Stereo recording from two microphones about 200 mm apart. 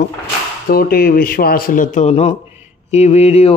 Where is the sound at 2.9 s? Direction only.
35° left (ahead or behind).